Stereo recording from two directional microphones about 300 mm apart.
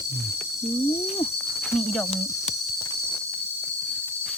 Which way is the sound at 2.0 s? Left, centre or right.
Centre.